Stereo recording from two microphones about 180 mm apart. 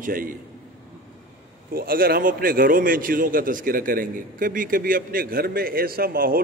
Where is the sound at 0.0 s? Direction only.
50° right (ahead or behind).